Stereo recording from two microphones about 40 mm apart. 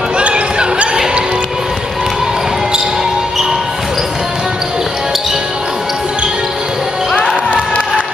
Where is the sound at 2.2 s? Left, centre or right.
Centre.